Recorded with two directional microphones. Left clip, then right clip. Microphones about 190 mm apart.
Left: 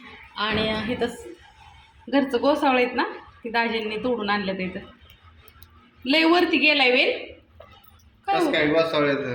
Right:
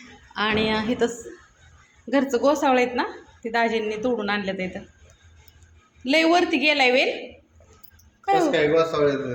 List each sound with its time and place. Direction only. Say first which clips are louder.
0.3 s a woman's voice: right 2 dB; 25° right (ahead or behind)
6.1 s a woman's voice: even; 10° right (ahead or behind)
8.4 s speech: right 1 dB; 55° right (ahead or behind)